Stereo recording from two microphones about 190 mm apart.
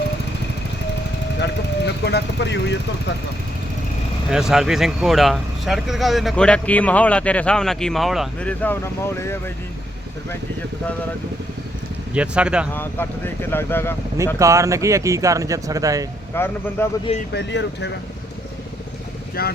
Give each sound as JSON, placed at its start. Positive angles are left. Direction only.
{"t": 1.4, "sound": "speech", "side_deg": 60}
{"t": 4.3, "sound": "speech", "side_deg": -5}
{"t": 12.1, "sound": "speech", "side_deg": -5}
{"t": 12.7, "sound": "speech", "side_deg": 10}
{"t": 14.3, "sound": "speech", "side_deg": -15}
{"t": 16.3, "sound": "speech", "side_deg": 10}
{"t": 17.3, "sound": "speech", "side_deg": 65}
{"t": 19.4, "sound": "speech", "side_deg": 50}